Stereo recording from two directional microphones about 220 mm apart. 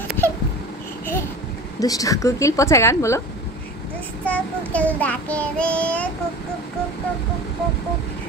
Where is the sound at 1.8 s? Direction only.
15° left (ahead or behind).